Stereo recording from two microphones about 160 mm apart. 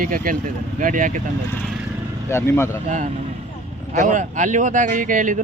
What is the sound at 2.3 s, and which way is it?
Speech, 15° left (ahead or behind).